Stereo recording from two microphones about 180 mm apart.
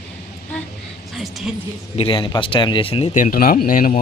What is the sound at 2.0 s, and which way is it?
Speech, 30° left (ahead or behind).